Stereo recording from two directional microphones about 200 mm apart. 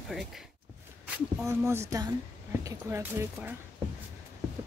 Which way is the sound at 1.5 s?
15° right (ahead or behind).